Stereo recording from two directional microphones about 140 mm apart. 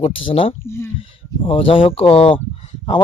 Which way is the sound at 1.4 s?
40° left (ahead or behind).